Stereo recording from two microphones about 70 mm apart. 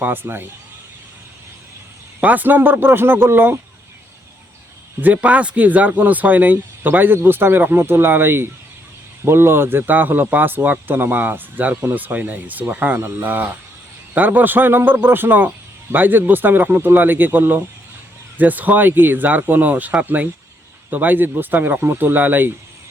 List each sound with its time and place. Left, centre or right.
0.0 s speech: right
2.2 s speech: right
4.9 s speech: right